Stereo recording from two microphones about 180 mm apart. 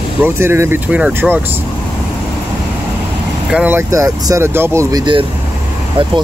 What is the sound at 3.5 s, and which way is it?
Speech, 10° right (ahead or behind).